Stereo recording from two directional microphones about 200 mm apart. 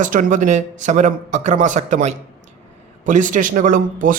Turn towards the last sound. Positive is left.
turn(degrees=-40)  # may be behind; listen again after turning